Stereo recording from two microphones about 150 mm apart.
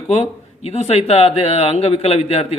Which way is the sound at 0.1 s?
45° left (ahead or behind).